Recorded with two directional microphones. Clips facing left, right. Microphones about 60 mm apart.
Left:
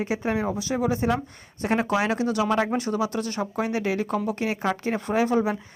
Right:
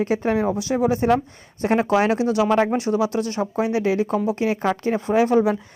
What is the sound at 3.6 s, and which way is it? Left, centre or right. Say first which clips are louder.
Speech: right 6 dB; left.